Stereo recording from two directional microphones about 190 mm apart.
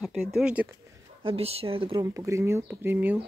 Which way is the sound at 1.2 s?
30° right (ahead or behind).